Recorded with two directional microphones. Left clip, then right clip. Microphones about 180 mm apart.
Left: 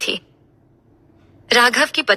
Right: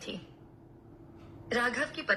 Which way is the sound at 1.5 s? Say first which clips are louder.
Left 17 dB; 65° left (ahead or behind).